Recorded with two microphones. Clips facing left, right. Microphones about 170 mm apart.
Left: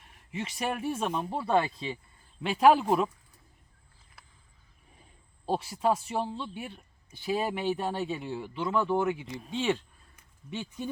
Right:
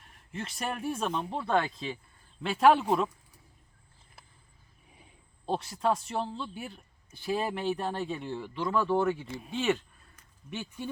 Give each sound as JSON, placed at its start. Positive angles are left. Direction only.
{"t": 0.0, "sound": "speech", "side_deg": 0}
{"t": 5.5, "sound": "speech", "side_deg": 5}
{"t": 8.6, "sound": "speech", "side_deg": 20}
{"t": 9.6, "sound": "a sound", "side_deg": 15}